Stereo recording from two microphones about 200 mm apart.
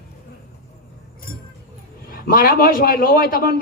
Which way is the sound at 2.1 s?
45° left (ahead or behind).